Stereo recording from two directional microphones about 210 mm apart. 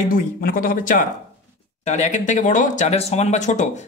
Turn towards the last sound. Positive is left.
turn(degrees=35)  # may be behind; listen again after turning